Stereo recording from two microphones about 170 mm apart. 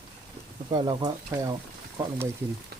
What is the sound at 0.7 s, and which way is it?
Speech, 25° right (ahead or behind).